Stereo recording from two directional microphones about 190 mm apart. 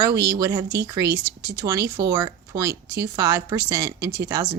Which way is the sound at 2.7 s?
60° right (ahead or behind).